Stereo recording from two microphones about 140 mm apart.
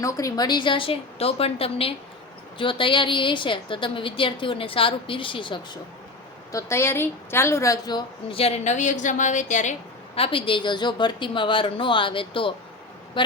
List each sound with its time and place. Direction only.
0.0 s a woman's voice: 25° left (ahead or behind)
6.5 s speech: 20° left (ahead or behind)
8.3 s a woman's voice: 45° left (ahead or behind); by 9.7 s 60° left (ahead or behind)
10.2 s a woman's voice: 40° left (ahead or behind)